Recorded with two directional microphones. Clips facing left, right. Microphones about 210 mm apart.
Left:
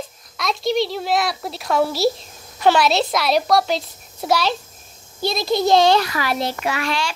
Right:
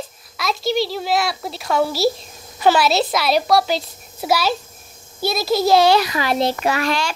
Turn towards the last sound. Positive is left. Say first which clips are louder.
# right 3 dB
turn(degrees=-40)  # may be behind; listen again after turning